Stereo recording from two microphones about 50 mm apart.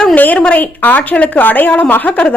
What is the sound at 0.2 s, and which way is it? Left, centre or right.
A woman's voice, left.